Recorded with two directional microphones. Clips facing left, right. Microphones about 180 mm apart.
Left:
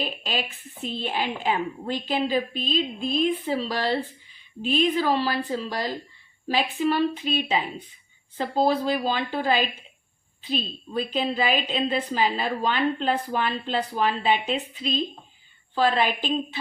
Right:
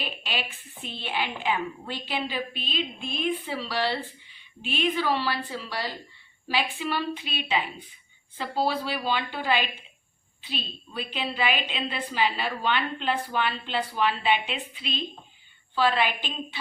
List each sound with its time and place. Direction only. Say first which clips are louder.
0.0 s a woman's voice: left 4 dB; 40° left (ahead or behind)